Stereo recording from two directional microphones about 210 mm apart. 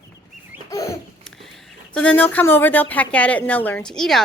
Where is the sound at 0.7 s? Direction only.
15° left (ahead or behind).